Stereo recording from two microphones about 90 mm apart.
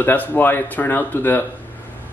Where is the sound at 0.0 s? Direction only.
20° left (ahead or behind).